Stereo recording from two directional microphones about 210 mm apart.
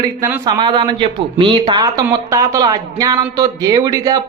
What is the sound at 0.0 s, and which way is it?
A man's voice, 15° right (ahead or behind).